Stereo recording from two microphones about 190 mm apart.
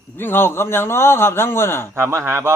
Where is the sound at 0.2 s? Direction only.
10° left (ahead or behind).